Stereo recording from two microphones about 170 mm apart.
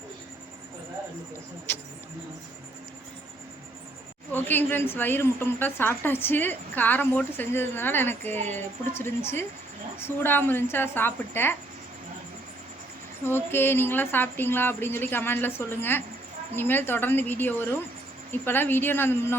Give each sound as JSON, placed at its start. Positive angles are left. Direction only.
{"t": 1.7, "sound": "a woman's voice", "side_deg": 10}
{"t": 4.3, "sound": "a woman's voice", "side_deg": 10}
{"t": 13.2, "sound": "a woman's voice", "side_deg": 15}